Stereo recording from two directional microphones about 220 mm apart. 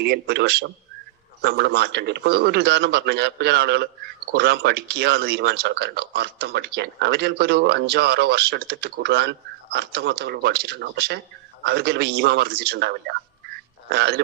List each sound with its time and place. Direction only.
0.0 s a man's voice: 50° right (ahead or behind)